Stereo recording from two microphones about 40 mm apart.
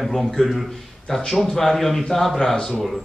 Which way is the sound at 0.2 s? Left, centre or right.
Centre.